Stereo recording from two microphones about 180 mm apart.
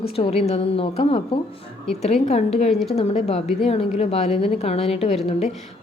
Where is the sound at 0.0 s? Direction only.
35° left (ahead or behind).